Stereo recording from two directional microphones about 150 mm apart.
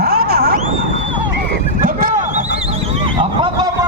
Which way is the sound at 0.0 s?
90° right.